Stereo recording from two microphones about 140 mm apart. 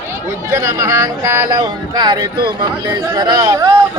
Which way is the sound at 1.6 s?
30° right (ahead or behind).